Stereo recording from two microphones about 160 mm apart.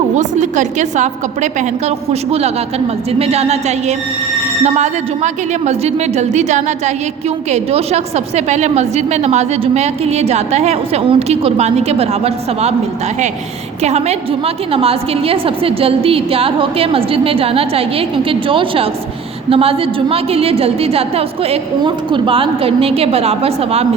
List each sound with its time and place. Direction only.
0.2 s a woman's voice: 50° right (ahead or behind)
13.8 s a woman's voice: 40° right (ahead or behind)